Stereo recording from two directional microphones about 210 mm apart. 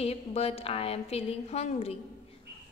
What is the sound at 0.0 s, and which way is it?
A woman's voice, 30° left (ahead or behind).